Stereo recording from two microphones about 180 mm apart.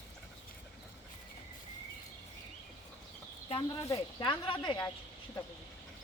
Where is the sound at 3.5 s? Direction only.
30° left (ahead or behind).